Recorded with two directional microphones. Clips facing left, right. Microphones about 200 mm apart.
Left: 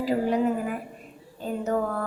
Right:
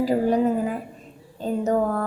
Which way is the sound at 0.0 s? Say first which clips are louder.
Right 4 dB; 40° right (ahead or behind).